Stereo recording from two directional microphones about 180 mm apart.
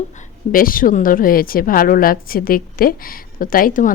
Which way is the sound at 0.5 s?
50° left (ahead or behind).